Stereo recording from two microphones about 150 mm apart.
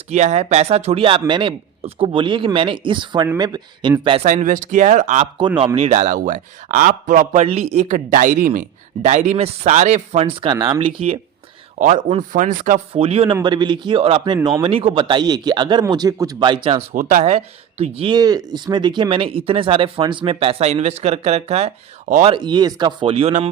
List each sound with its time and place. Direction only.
0.1 s a man's voice: 50° right (ahead or behind)
4.3 s a man's voice: 55° right (ahead or behind)
5.5 s a man's voice: 35° right (ahead or behind); by 7.4 s 60° right (ahead or behind)
7.4 s speech: 45° right (ahead or behind)
11.8 s a man's voice: 55° right (ahead or behind)
12.9 s speech: 40° right (ahead or behind)
13.4 s a man's voice: 30° right (ahead or behind)
16.9 s speech: 60° right (ahead or behind)
22.3 s speech: 30° right (ahead or behind)